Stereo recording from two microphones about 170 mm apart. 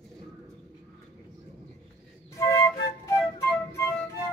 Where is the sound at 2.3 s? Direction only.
15° left (ahead or behind).